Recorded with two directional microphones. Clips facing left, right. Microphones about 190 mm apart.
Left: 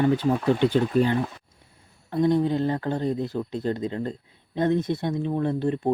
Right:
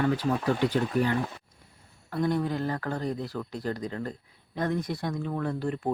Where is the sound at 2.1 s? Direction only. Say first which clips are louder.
Left 6 dB; 20° left (ahead or behind).